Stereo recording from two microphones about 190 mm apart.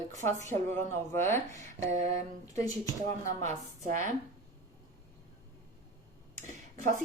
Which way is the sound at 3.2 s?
40° right (ahead or behind).